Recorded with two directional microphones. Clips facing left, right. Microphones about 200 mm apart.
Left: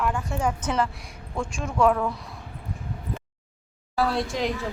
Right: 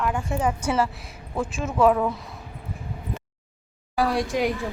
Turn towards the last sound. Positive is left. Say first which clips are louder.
# right 2 dB
turn(degrees=-15)  # may be behind; listen again after turning